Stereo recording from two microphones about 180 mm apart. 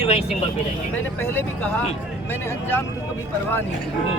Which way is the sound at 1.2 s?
10° left (ahead or behind).